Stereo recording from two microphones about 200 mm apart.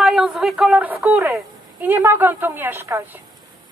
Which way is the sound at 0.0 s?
Centre (ahead or behind).